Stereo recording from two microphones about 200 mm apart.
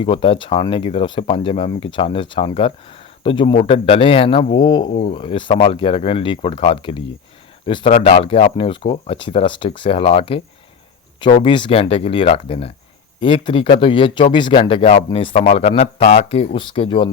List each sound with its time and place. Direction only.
0.0 s speech: 25° left (ahead or behind)
4.9 s speech: 40° left (ahead or behind)
5.1 s speech: 25° left (ahead or behind)
11.4 s speech: 25° left (ahead or behind)